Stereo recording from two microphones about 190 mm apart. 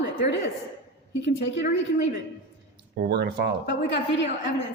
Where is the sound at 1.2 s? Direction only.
70° left (ahead or behind).